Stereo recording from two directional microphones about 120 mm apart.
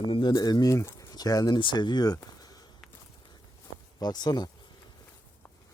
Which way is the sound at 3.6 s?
35° left (ahead or behind).